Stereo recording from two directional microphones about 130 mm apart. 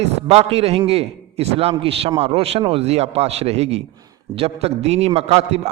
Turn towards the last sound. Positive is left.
turn(degrees=-55)  # may be behind; listen again after turning